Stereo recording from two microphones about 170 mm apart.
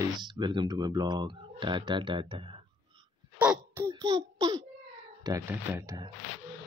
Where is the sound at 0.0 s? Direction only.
25° right (ahead or behind).